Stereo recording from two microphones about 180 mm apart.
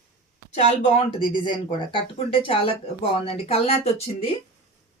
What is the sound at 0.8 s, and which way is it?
Speech, 30° left (ahead or behind).